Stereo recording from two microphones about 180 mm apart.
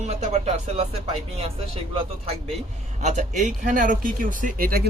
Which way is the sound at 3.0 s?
40° right (ahead or behind).